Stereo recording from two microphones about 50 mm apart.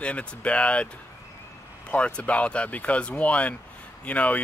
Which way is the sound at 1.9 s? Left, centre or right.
Left.